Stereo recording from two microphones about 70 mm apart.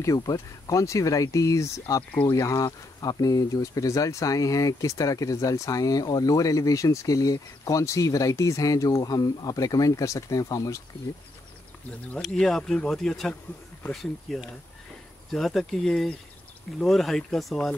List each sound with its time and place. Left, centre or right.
0.0 s speech: left
12.4 s speech: centre